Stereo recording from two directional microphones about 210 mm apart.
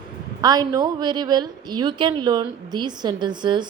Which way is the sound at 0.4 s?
20° right (ahead or behind).